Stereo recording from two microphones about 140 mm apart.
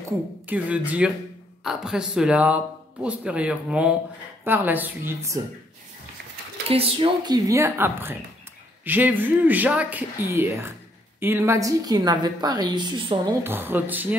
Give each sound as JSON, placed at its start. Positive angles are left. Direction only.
{"t": 0.5, "sound": "speech", "side_deg": -10}
{"t": 6.7, "sound": "a woman's voice", "side_deg": -40}
{"t": 13.4, "sound": "speech", "side_deg": -15}